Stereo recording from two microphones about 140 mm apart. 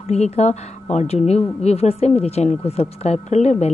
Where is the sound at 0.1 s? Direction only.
55° left (ahead or behind).